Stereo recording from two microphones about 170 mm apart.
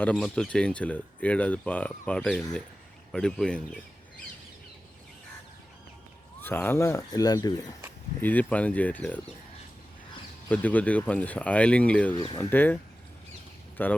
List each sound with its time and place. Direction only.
0.0 s speech: 5° left (ahead or behind)
6.4 s speech: 10° left (ahead or behind)
8.2 s speech: 10° left (ahead or behind)
10.5 s speech: 10° left (ahead or behind)
12.1 s speech: 25° left (ahead or behind)
12.4 s speech: 10° left (ahead or behind)